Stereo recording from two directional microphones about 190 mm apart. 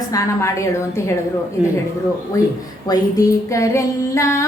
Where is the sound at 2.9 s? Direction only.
15° left (ahead or behind).